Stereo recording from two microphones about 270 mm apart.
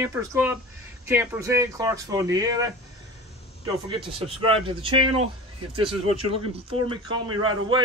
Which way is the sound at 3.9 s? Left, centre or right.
Centre.